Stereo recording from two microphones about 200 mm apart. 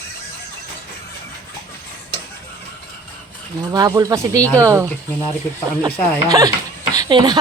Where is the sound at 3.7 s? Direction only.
20° right (ahead or behind).